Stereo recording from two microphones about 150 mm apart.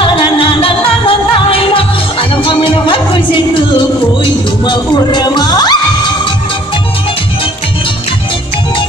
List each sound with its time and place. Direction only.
0.0 s music: 35° left (ahead or behind)